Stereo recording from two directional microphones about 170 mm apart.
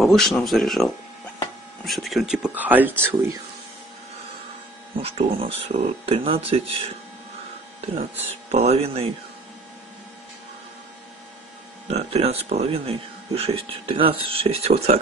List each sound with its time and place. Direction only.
0.0 s speech: centre (ahead or behind)
1.9 s speech: centre (ahead or behind)
5.0 s speech: 35° right (ahead or behind)
8.5 s speech: 40° right (ahead or behind)
11.9 s speech: 35° right (ahead or behind)